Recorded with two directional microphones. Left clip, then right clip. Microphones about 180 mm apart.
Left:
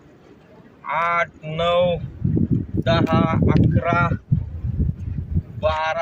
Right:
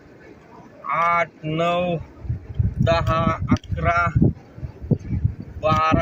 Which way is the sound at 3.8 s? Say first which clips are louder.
Right 2 dB; 15° left (ahead or behind).